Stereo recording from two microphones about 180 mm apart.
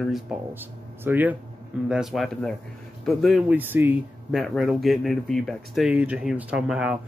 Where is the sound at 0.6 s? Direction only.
10° right (ahead or behind).